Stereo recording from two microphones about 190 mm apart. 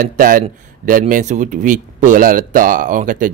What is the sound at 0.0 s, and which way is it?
Speech, 45° right (ahead or behind).